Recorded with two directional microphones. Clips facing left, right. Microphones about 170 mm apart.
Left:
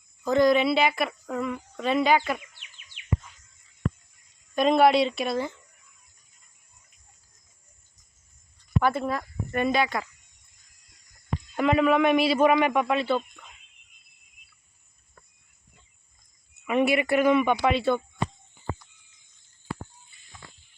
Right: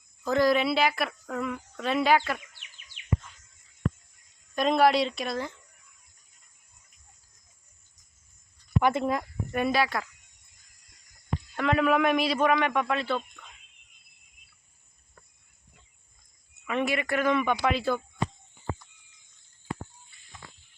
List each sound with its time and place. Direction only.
0.3 s a woman's voice: centre (ahead or behind)
4.5 s a woman's voice: centre (ahead or behind)
8.8 s speech: 20° right (ahead or behind)
9.5 s a woman's voice: 5° right (ahead or behind)
11.5 s a woman's voice: 5° left (ahead or behind)
16.6 s speech: 15° left (ahead or behind)